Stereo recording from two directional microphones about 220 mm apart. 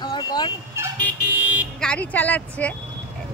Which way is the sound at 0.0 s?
20° left (ahead or behind).